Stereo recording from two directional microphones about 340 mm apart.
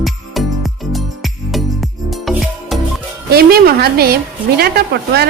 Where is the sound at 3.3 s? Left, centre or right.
Right.